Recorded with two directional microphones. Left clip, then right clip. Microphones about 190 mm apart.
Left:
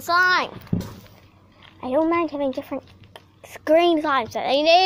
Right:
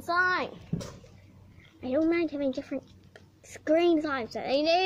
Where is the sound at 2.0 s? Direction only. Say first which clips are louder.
Left 6 dB; centre (ahead or behind).